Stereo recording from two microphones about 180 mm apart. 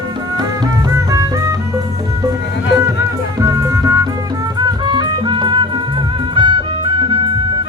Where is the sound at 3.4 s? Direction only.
15° right (ahead or behind).